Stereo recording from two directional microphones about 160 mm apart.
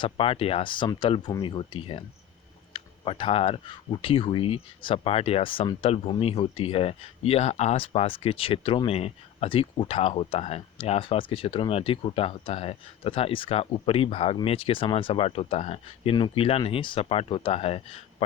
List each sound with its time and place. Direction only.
0.0 s speech: 35° left (ahead or behind)